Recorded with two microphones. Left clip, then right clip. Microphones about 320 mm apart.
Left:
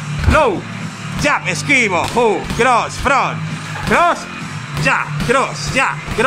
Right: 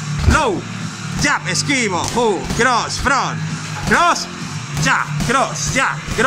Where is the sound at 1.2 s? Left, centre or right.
Centre.